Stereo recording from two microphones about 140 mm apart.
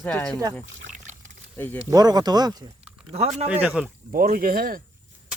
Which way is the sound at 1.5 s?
15° left (ahead or behind).